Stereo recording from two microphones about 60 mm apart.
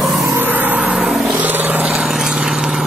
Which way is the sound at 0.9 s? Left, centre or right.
Centre.